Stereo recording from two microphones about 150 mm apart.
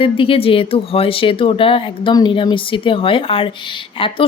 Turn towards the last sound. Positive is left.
turn(degrees=35)  # may be behind; listen again after turning